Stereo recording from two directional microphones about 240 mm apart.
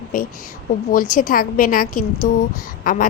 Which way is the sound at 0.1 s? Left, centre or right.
Left.